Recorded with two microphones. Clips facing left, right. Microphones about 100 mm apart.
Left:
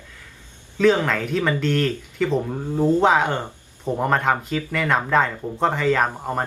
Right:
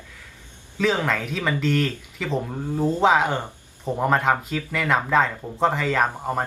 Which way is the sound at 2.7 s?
20° left (ahead or behind).